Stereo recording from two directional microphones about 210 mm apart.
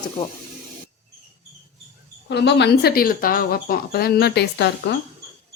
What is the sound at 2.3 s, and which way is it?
Speech, 55° left (ahead or behind).